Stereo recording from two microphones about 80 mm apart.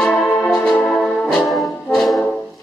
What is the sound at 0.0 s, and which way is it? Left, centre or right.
Music, centre.